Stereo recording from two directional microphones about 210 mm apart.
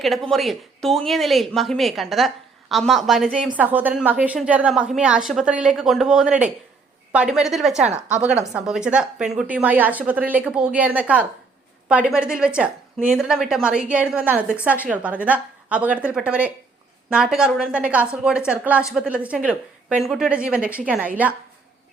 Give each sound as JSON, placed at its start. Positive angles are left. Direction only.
{"t": 0.0, "sound": "a woman's voice", "side_deg": 0}
{"t": 7.8, "sound": "a woman's voice", "side_deg": -35}
{"t": 8.5, "sound": "a woman's voice", "side_deg": -5}